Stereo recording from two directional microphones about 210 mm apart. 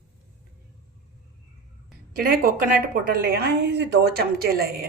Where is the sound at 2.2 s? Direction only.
45° right (ahead or behind).